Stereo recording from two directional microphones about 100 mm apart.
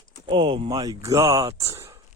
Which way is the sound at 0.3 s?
55° right (ahead or behind).